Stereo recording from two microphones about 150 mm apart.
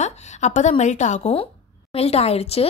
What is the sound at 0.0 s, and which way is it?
A woman's voice, 50° left (ahead or behind).